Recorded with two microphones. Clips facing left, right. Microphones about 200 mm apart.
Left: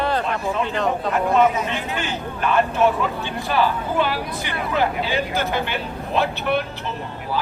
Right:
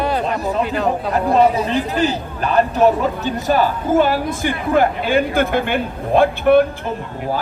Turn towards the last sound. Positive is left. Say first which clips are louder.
# right 5 dB
turn(degrees=-50)  # may be behind; listen again after turning